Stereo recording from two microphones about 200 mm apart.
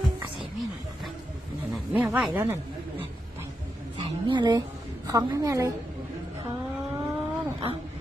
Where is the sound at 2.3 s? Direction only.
10° right (ahead or behind).